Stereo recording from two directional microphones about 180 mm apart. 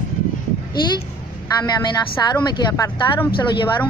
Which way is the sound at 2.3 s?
25° left (ahead or behind).